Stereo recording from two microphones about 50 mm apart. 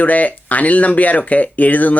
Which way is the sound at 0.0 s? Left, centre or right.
Left.